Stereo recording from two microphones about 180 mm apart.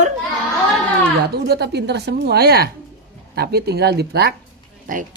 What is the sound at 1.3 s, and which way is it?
Speech, 65° right (ahead or behind).